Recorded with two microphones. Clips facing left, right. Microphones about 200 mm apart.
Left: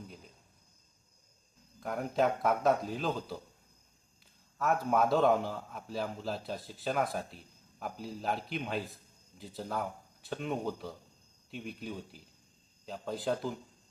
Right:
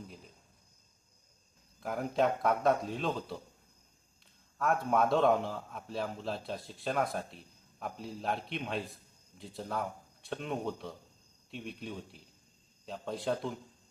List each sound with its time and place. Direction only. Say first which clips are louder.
1.8 s a man's voice: even; centre (ahead or behind)
4.5 s a man's voice: even; centre (ahead or behind)